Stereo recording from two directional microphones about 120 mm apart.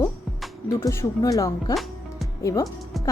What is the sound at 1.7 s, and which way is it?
Music, centre (ahead or behind).